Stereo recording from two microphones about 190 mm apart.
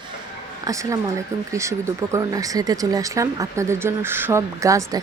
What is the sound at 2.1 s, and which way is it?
A woman's voice, 20° right (ahead or behind).